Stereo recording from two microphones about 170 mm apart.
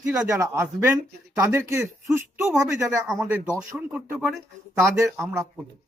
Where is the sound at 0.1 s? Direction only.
15° right (ahead or behind).